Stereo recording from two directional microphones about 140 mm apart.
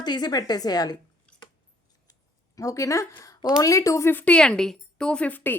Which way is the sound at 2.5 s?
25° left (ahead or behind).